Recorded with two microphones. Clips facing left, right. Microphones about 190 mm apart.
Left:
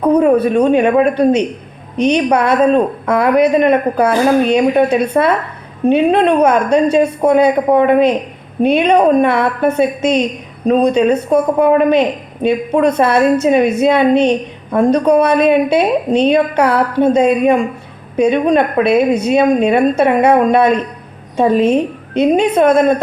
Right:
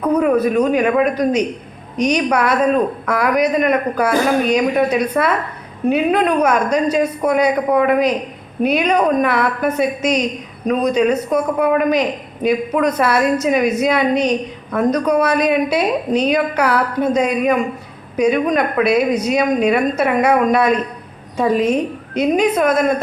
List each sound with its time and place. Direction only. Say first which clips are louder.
0.0 s a woman's voice: left 4 dB; 30° left (ahead or behind)